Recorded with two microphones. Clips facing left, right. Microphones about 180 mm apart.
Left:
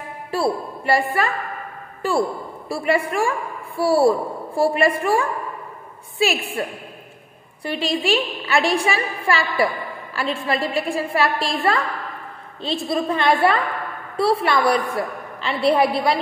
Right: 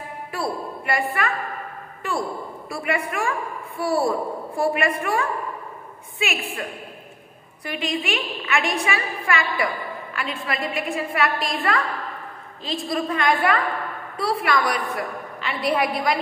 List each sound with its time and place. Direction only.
0.3 s a woman's voice: 30° left (ahead or behind)